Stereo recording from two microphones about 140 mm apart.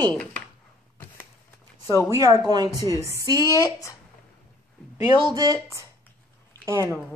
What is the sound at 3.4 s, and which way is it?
Speech, 25° left (ahead or behind).